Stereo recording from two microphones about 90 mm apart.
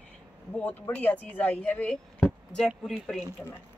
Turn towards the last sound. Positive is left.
turn(degrees=5)  # may be behind; listen again after turning